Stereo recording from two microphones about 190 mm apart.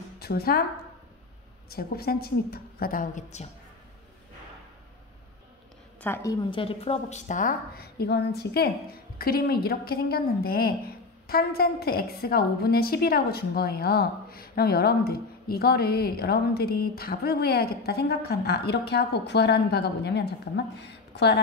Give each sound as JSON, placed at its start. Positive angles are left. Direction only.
{"t": 0.2, "sound": "a woman's voice", "side_deg": 55}
{"t": 1.7, "sound": "a woman's voice", "side_deg": 55}
{"t": 5.9, "sound": "a woman's voice", "side_deg": 10}
{"t": 6.3, "sound": "a woman's voice", "side_deg": 30}